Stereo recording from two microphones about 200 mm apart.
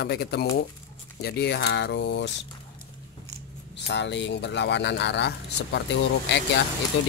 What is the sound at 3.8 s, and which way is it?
Speech, 60° left (ahead or behind).